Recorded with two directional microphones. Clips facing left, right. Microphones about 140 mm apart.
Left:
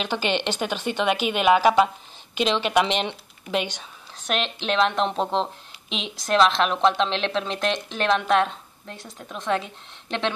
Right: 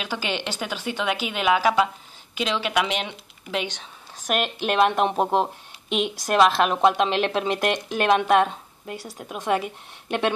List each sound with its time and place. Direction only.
0.0 s speech: 20° left (ahead or behind)
4.3 s speech: 10° right (ahead or behind)
5.9 s a woman's voice: 55° right (ahead or behind)
6.2 s speech: 10° right (ahead or behind)